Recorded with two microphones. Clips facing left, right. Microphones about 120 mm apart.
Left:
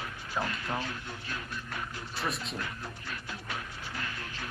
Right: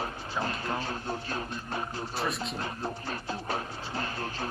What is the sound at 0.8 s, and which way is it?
Music, 35° right (ahead or behind).